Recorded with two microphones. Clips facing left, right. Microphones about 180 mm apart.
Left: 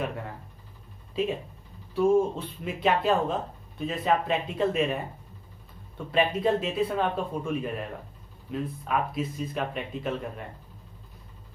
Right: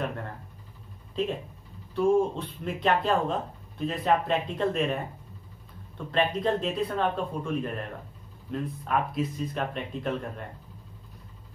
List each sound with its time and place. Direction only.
1.2 s speech: 5° left (ahead or behind)
6.1 s speech: 5° left (ahead or behind)